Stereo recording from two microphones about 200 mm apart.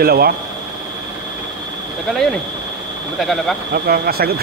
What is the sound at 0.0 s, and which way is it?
Speech, 50° right (ahead or behind).